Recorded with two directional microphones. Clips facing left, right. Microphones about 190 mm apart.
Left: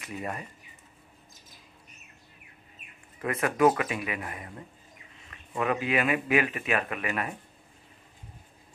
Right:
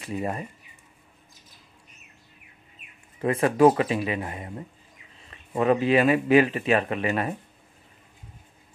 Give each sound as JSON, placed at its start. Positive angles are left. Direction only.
{"t": 0.0, "sound": "speech", "side_deg": -30}
{"t": 3.2, "sound": "speech", "side_deg": -30}